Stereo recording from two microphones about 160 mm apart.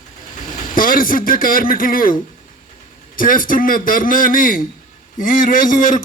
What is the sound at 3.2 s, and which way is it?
A man's voice, 60° left (ahead or behind).